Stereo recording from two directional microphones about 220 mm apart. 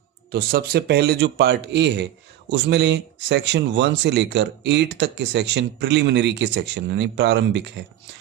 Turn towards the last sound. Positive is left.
turn(degrees=-50)  # may be behind; listen again after turning